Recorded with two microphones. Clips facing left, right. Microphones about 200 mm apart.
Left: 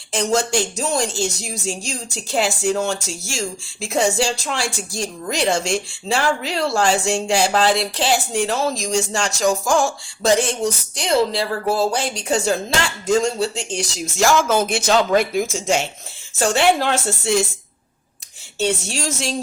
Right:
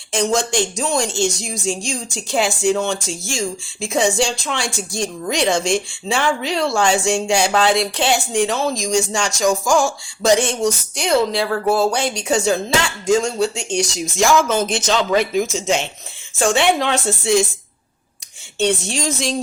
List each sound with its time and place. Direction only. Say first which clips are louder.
0.1 s a woman's voice: right 1 dB; 5° left (ahead or behind)
14.7 s a man's voice: left 1 dB; 55° left (ahead or behind)
15.1 s a woman's voice: right 1 dB; 5° left (ahead or behind)
15.4 s speech: right 2 dB; 50° left (ahead or behind)
16.4 s a woman's voice: even; 5° left (ahead or behind)
18.6 s a woman's voice: right 3 dB; 5° left (ahead or behind)